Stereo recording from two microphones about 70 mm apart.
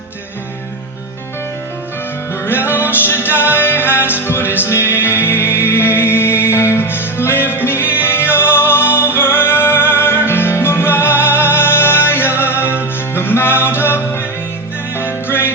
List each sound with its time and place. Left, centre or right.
2.5 s music: left